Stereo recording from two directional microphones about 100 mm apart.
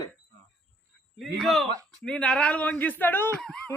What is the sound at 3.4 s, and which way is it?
Speech, 5° left (ahead or behind).